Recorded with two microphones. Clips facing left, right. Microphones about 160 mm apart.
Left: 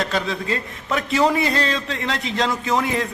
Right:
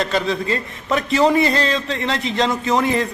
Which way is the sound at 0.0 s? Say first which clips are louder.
Right 3 dB; 5° left (ahead or behind).